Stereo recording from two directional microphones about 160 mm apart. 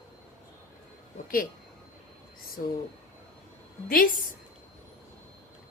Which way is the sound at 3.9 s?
60° left (ahead or behind).